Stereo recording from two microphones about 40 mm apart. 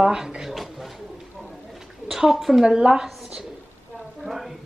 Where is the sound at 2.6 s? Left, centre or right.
Centre.